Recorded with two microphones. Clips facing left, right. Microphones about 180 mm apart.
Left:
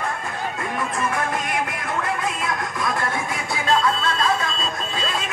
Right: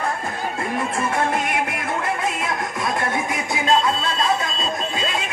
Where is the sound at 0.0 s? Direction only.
35° right (ahead or behind).